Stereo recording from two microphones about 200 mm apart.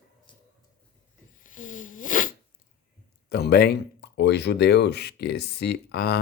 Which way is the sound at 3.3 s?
55° left (ahead or behind).